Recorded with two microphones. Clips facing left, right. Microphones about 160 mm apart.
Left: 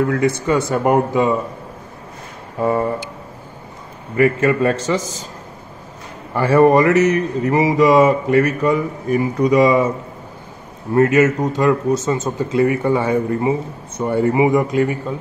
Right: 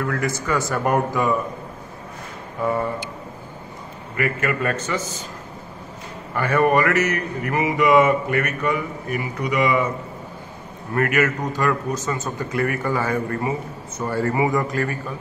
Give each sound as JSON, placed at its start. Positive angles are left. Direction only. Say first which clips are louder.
{"t": 0.0, "sound": "a man's voice", "louder": "left 7 dB", "side_deg": 25}
{"t": 2.6, "sound": "speech", "louder": "left 5 dB", "side_deg": 35}
{"t": 4.2, "sound": "speech", "louder": "left 8 dB", "side_deg": 35}
{"t": 6.3, "sound": "speech", "louder": "left 6 dB", "side_deg": 30}
{"t": 11.0, "sound": "a man's voice", "louder": "left 7 dB", "side_deg": 25}